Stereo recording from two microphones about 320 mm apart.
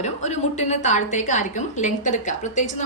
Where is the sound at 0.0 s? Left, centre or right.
Left.